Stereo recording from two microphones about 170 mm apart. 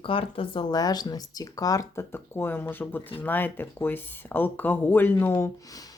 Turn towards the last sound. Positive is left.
turn(degrees=20)  # may be behind; listen again after turning